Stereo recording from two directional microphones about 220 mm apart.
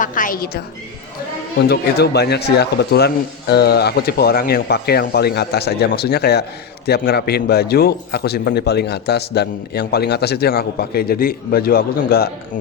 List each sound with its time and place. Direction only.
0.0 s a woman's voice: 40° left (ahead or behind)
1.6 s a man's voice: 50° left (ahead or behind)